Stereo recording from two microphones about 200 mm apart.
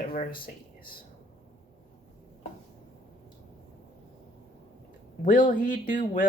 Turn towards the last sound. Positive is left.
turn(degrees=40)  # may be behind; listen again after turning